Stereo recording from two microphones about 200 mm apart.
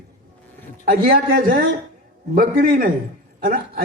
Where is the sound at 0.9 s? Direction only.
50° right (ahead or behind).